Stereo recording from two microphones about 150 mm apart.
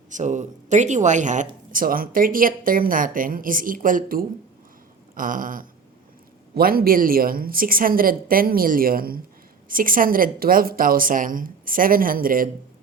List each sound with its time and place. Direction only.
0.1 s speech: 55° right (ahead or behind)
6.5 s a woman's voice: 80° right